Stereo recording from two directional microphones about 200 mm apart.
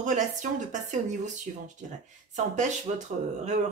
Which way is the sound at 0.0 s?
40° right (ahead or behind).